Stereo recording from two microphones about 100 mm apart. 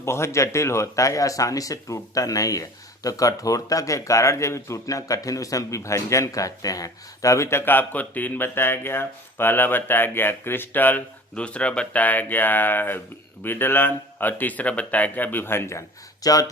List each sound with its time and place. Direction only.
0.0 s speech: 25° left (ahead or behind)
16.2 s speech: 40° left (ahead or behind)